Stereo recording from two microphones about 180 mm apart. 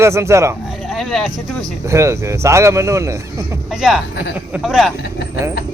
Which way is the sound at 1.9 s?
15° right (ahead or behind).